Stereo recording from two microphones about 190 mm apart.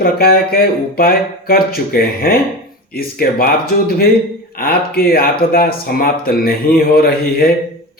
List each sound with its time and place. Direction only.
0.0 s speech: 50° left (ahead or behind)